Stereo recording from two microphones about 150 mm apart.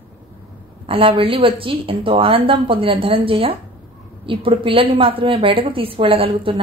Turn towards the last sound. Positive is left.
turn(degrees=-35)  # may be behind; listen again after turning